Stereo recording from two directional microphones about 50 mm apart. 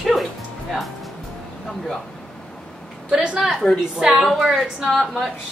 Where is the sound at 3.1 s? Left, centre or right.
Centre.